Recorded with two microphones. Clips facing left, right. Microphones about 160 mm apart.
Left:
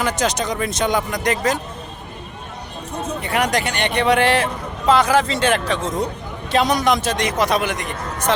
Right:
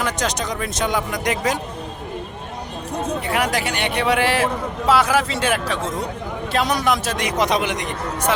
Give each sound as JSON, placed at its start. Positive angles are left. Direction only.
{"t": 0.0, "sound": "speech", "side_deg": 0}
{"t": 3.2, "sound": "speech", "side_deg": -5}
{"t": 7.3, "sound": "a man's voice", "side_deg": -20}